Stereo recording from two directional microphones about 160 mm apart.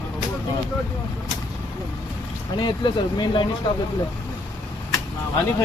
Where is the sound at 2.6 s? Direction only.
25° left (ahead or behind).